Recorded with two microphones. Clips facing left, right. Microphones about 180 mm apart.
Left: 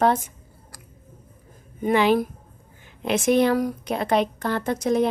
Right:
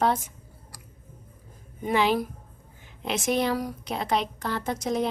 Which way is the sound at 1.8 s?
55° left (ahead or behind).